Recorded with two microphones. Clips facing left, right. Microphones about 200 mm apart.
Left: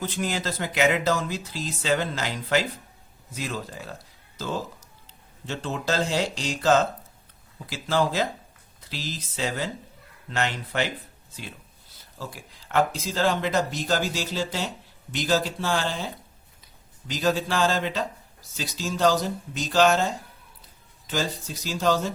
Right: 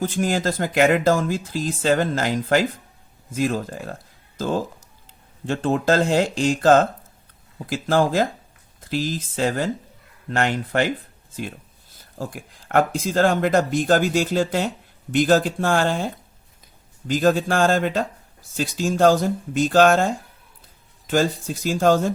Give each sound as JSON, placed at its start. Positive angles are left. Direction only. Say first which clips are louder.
{"t": 0.0, "sound": "speech", "louder": "right 7 dB", "side_deg": -50}